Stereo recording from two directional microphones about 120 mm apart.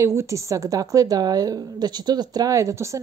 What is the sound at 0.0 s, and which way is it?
A woman's voice, 25° right (ahead or behind).